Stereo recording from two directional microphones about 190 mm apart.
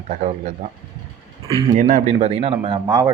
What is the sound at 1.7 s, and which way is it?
Speech, 40° right (ahead or behind).